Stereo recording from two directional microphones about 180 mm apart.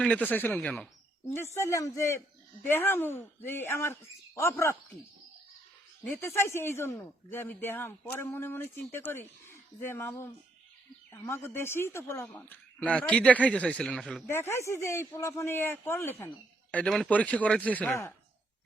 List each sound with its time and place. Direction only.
0.0 s speech: 10° left (ahead or behind)
6.1 s speech: 15° left (ahead or behind)
14.3 s speech: 15° left (ahead or behind)